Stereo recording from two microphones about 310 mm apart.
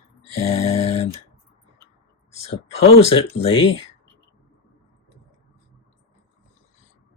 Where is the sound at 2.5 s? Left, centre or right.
Centre.